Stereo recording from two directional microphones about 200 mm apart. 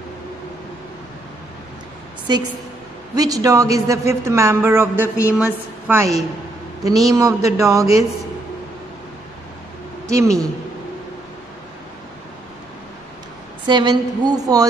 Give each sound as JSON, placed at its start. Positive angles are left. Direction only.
{"t": 3.2, "sound": "speech", "side_deg": -15}
{"t": 10.0, "sound": "speech", "side_deg": -15}
{"t": 13.7, "sound": "a woman's voice", "side_deg": -20}